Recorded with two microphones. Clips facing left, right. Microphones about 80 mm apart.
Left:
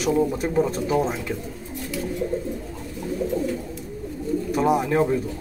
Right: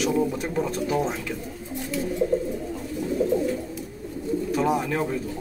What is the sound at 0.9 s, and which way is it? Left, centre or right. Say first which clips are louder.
Speech: left 3 dB; centre.